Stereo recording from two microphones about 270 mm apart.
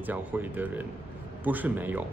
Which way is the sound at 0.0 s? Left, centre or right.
Centre.